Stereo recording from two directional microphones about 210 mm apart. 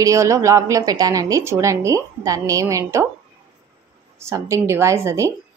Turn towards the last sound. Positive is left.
turn(degrees=-15)  # may be behind; listen again after turning